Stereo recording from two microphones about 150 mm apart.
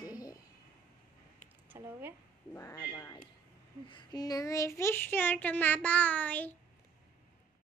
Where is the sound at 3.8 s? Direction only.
30° left (ahead or behind); by 6.5 s 10° left (ahead or behind).